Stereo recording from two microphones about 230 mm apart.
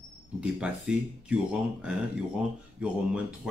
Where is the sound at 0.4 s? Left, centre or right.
Centre.